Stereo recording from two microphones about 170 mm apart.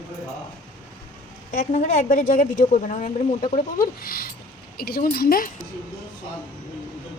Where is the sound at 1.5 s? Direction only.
45° left (ahead or behind).